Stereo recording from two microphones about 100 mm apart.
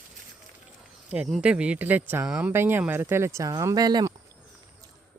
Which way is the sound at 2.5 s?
20° right (ahead or behind).